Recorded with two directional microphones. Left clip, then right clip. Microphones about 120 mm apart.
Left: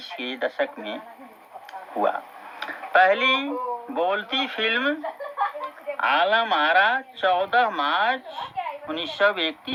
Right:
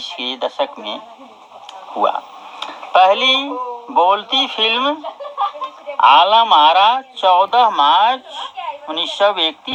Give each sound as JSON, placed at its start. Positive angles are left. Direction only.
{"t": 0.2, "sound": "speech", "side_deg": 40}
{"t": 0.8, "sound": "speech", "side_deg": -15}
{"t": 2.6, "sound": "speech", "side_deg": -15}
{"t": 4.8, "sound": "a sound", "side_deg": -15}
{"t": 6.5, "sound": "speech", "side_deg": -15}
{"t": 6.7, "sound": "speech", "side_deg": 40}
{"t": 7.2, "sound": "speech", "side_deg": -20}
{"t": 7.7, "sound": "speech", "side_deg": 40}
{"t": 8.1, "sound": "speech", "side_deg": -20}
{"t": 8.4, "sound": "a sound", "side_deg": 35}
{"t": 9.1, "sound": "speech", "side_deg": 35}